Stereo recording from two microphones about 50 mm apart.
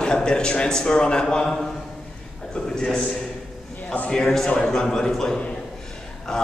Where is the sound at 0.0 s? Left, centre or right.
Centre.